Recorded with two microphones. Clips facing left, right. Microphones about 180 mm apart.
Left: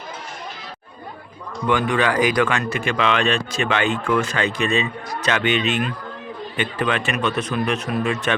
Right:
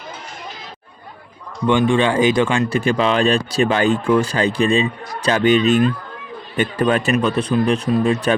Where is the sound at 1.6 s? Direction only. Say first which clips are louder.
Right 4 dB; 25° right (ahead or behind).